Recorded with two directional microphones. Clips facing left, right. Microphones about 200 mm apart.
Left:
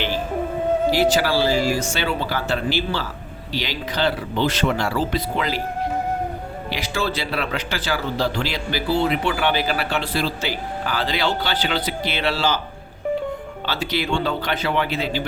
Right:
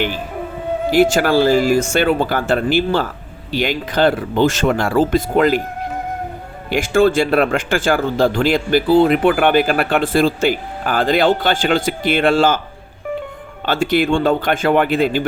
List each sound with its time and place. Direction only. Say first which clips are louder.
0.9 s speech: right 8 dB; 50° right (ahead or behind)
6.7 s speech: right 12 dB; 50° right (ahead or behind)
13.7 s speech: right 9 dB; 50° right (ahead or behind)